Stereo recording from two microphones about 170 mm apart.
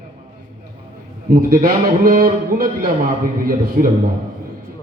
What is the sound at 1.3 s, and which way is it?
A man's voice, 60° right (ahead or behind).